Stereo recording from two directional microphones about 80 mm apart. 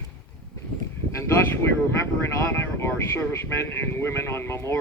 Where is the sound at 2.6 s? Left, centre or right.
Left.